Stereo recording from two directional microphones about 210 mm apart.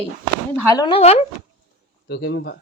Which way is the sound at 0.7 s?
20° left (ahead or behind).